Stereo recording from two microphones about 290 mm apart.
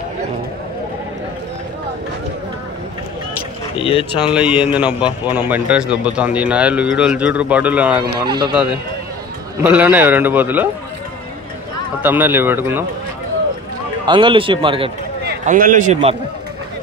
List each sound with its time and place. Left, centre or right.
3.7 s speech: centre
4.2 s a man's voice: centre
8.2 s a man's voice: centre
9.6 s a man's voice: centre
12.0 s a man's voice: centre
14.0 s a man's voice: centre
15.4 s speech: right